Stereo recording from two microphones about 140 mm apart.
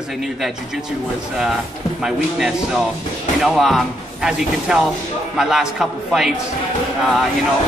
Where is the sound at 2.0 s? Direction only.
5° right (ahead or behind).